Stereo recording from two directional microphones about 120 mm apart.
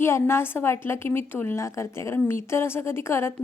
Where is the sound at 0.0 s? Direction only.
20° left (ahead or behind).